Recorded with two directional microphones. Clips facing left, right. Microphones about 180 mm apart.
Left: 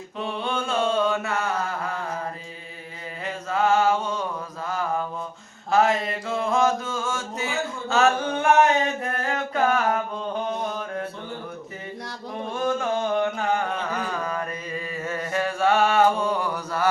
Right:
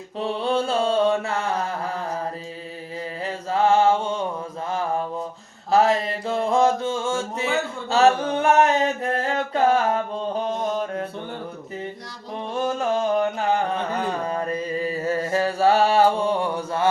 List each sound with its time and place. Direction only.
0.2 s mantra: 35° right (ahead or behind)
3.2 s mantra: 30° right (ahead or behind)
7.9 s a sound: 35° right (ahead or behind)
9.0 s chant: 30° right (ahead or behind)
12.5 s carnatic music: 35° right (ahead or behind)